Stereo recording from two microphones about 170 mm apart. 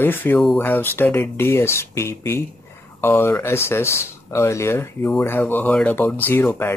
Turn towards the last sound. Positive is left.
turn(degrees=10)  # may be behind; listen again after turning